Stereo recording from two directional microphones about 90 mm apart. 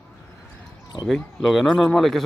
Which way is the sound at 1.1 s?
Centre (ahead or behind).